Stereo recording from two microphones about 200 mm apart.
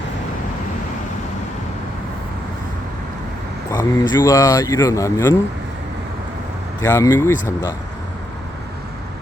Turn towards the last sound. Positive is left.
turn(degrees=15)  # may be behind; listen again after turning